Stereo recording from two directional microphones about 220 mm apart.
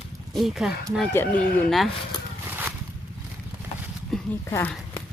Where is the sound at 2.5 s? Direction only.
10° right (ahead or behind).